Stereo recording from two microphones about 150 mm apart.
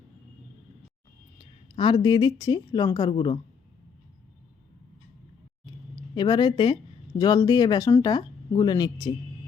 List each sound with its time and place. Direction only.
1.4 s a woman's voice: 35° left (ahead or behind)
6.1 s speech: 30° left (ahead or behind)